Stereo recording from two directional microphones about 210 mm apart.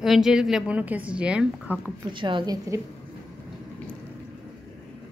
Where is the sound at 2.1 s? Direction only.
25° right (ahead or behind).